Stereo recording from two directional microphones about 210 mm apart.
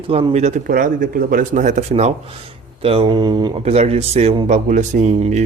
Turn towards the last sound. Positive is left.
turn(degrees=-35)  # may be behind; listen again after turning